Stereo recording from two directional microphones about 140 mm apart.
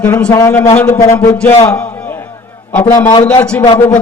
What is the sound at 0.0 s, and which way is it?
A man's voice, 10° left (ahead or behind).